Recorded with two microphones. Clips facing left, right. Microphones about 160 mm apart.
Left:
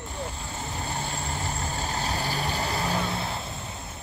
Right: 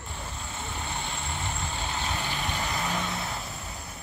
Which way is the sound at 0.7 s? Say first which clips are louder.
Left 3 dB; 40° left (ahead or behind).